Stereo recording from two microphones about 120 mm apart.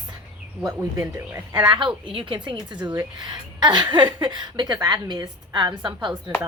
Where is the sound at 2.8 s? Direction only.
30° right (ahead or behind).